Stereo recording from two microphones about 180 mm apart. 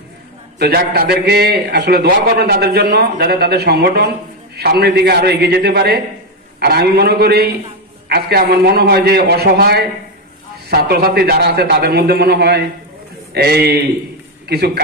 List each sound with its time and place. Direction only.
0.6 s a man's voice: 60° right (ahead or behind)